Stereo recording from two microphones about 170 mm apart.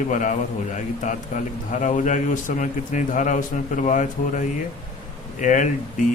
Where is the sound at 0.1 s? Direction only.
50° left (ahead or behind).